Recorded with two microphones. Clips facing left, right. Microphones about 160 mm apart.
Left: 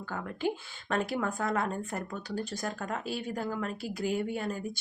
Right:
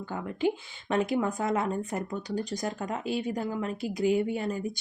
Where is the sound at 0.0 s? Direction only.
20° right (ahead or behind).